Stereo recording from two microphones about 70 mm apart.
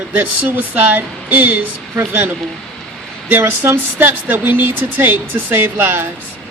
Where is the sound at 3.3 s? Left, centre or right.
Right.